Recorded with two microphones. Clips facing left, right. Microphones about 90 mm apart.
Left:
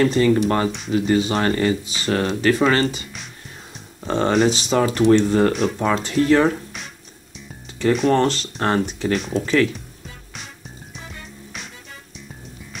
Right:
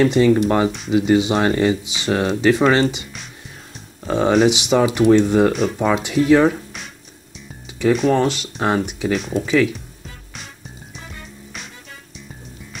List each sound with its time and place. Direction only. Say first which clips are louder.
0.0 s speech: right 2 dB; 15° right (ahead or behind)
4.0 s speech: right 2 dB; 5° right (ahead or behind)
4.5 s speech: right 3 dB; 15° right (ahead or behind)
11.0 s music: even; centre (ahead or behind)